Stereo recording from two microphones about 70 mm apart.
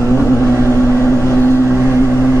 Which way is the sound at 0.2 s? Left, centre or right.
Left.